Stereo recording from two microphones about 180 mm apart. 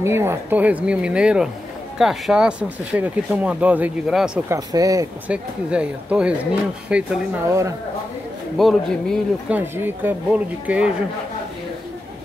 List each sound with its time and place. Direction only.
0.0 s speech: 15° right (ahead or behind)
4.5 s speech: 20° right (ahead or behind)
5.3 s speech: 5° right (ahead or behind)
8.5 s speech: centre (ahead or behind)
9.6 s speech: 10° right (ahead or behind)